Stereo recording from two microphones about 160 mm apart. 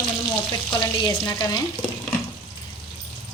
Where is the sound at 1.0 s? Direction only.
30° left (ahead or behind).